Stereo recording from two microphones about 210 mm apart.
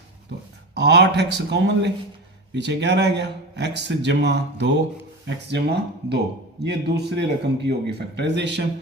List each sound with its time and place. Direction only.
0.7 s speech: 55° right (ahead or behind)